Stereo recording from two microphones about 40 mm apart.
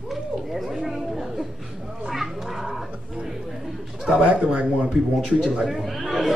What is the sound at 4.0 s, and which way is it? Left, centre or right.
A man's voice, centre.